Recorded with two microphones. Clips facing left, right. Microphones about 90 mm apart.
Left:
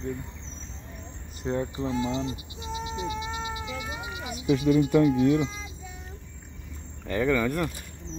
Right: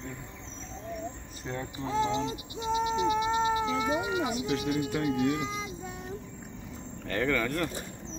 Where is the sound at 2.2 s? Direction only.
25° right (ahead or behind).